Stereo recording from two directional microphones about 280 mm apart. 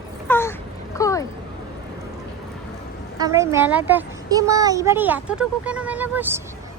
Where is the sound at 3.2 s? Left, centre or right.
Centre.